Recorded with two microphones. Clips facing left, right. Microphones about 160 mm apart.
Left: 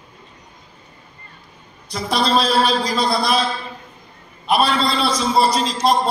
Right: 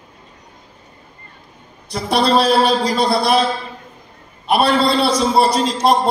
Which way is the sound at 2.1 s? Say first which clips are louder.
Right 4 dB; 65° right (ahead or behind).